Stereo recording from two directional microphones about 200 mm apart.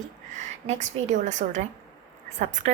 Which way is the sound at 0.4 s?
35° right (ahead or behind).